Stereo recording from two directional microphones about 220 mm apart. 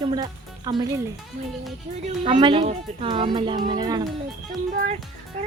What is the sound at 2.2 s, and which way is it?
A woman's voice, 25° right (ahead or behind).